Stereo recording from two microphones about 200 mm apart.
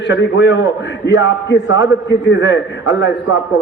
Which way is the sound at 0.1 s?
60° left (ahead or behind).